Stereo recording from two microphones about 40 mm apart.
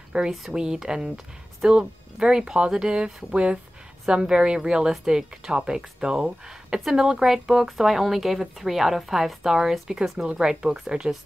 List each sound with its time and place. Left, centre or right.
0.1 s speech: right